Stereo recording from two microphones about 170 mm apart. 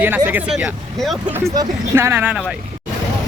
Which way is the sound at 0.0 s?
10° right (ahead or behind).